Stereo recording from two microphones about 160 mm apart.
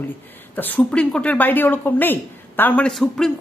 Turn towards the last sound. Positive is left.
turn(degrees=0)  # may be behind; listen again after turning